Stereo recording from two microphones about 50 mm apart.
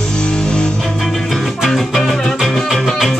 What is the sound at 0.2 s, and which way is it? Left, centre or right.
Music, centre.